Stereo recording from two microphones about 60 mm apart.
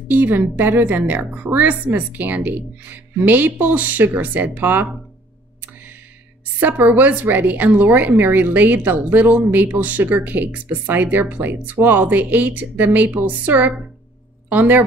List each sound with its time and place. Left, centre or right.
0.1 s a woman's voice: right
6.6 s a woman's voice: right